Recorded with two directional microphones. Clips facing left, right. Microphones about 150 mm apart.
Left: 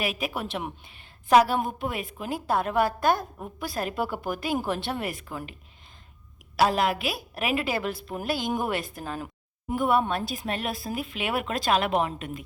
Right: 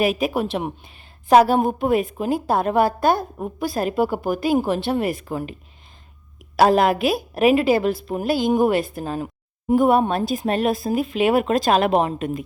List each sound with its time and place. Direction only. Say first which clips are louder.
0.0 s a woman's voice: right 10 dB; 40° right (ahead or behind)
6.6 s a woman's voice: right 7 dB; 50° right (ahead or behind); by 9.7 s 25° right (ahead or behind)
9.7 s a woman's voice: right 7 dB; 40° right (ahead or behind)